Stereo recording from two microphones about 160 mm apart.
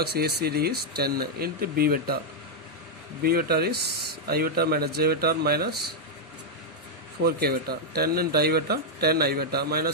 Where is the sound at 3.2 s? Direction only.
70° right (ahead or behind).